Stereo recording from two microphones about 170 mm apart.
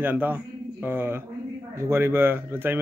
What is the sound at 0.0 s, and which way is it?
Speech, 10° right (ahead or behind).